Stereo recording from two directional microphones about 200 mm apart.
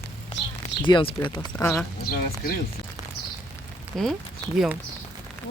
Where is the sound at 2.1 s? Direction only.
45° left (ahead or behind).